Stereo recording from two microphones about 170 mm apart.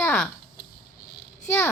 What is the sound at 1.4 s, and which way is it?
Speech, 15° left (ahead or behind).